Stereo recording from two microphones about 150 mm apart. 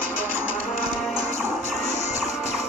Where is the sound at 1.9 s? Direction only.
50° left (ahead or behind).